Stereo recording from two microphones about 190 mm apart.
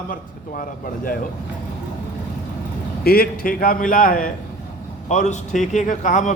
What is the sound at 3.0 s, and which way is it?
A man's voice, 55° left (ahead or behind).